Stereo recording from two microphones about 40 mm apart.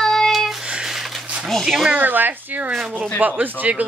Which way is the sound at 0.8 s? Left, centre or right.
Centre.